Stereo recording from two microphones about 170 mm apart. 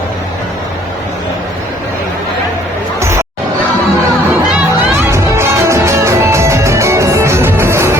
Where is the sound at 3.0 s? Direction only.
15° right (ahead or behind).